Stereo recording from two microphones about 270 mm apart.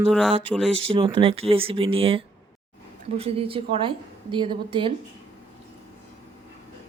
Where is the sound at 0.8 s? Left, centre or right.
Centre.